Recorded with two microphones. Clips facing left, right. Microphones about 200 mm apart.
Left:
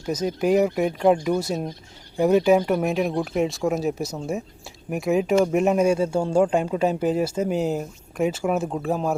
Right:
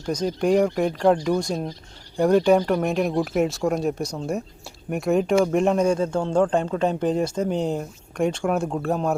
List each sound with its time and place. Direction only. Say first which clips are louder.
0.0 s speech: even; 5° left (ahead or behind)